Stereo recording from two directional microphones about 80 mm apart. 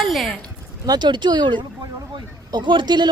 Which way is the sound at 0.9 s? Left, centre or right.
Right.